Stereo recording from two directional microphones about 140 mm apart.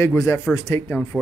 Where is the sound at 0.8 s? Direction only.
10° left (ahead or behind).